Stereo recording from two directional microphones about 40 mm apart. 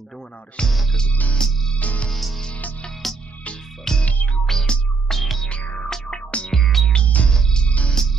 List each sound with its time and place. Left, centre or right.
0.6 s music: left
1.8 s music: left
2.1 s music: centre
5.5 s music: left
6.5 s music: centre
7.2 s music: centre